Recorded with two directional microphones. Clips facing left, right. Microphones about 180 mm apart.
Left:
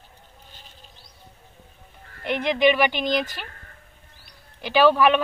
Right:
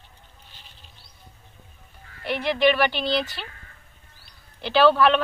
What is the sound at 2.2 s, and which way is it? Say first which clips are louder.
A woman's voice: left 1 dB; 15° left (ahead or behind).